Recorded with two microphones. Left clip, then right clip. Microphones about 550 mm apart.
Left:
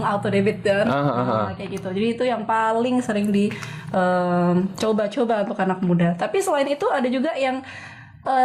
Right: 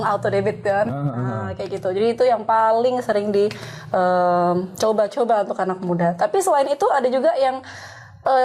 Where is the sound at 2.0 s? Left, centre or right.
Right.